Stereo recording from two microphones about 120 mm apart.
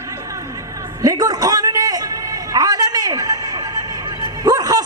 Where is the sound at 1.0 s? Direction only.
30° right (ahead or behind).